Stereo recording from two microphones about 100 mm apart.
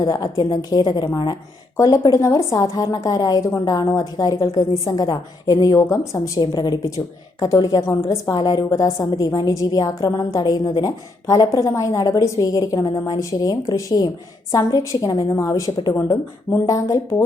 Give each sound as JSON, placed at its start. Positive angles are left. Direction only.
{"t": 0.0, "sound": "a woman's voice", "side_deg": 40}
{"t": 1.7, "sound": "a woman's voice", "side_deg": 35}